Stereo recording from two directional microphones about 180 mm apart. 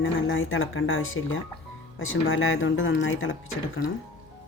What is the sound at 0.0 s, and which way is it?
Speech, 90° left.